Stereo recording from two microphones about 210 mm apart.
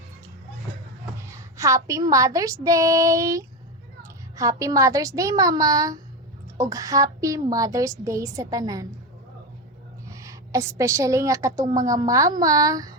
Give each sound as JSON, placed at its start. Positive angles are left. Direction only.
{"t": 1.3, "sound": "a woman's voice", "side_deg": -15}
{"t": 10.1, "sound": "a woman's voice", "side_deg": -15}